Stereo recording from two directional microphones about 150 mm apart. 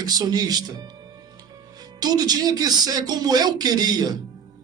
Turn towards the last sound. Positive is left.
turn(degrees=-25)  # may be behind; listen again after turning